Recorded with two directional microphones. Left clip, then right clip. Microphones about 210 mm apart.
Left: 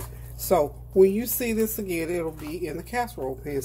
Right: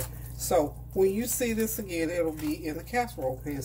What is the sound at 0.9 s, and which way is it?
Speech, 40° left (ahead or behind).